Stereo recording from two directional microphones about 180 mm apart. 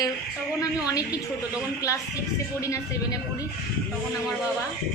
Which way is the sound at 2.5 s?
20° left (ahead or behind).